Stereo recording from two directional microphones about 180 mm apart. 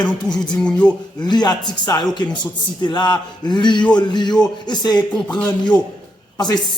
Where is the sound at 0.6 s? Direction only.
5° left (ahead or behind).